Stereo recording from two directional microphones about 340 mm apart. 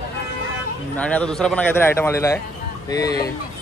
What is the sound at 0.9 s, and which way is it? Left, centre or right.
A man's voice, centre.